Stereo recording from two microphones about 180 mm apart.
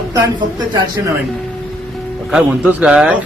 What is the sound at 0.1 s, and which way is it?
Speech, 25° right (ahead or behind).